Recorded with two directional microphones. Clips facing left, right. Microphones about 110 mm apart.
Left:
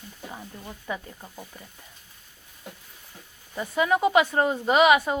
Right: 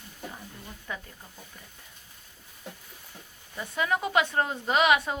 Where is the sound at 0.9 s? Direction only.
10° left (ahead or behind).